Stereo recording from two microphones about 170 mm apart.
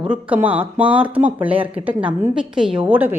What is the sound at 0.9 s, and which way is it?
Speech, 30° right (ahead or behind).